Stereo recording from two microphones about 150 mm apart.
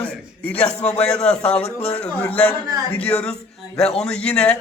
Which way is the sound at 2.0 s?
10° left (ahead or behind).